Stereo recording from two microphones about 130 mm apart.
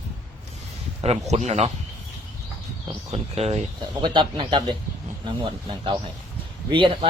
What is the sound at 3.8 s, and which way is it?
A man's voice, 40° right (ahead or behind).